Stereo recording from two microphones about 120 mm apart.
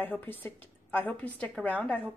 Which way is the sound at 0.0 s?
15° left (ahead or behind).